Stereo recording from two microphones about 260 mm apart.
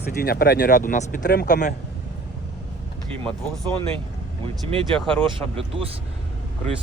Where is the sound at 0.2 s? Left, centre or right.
Left.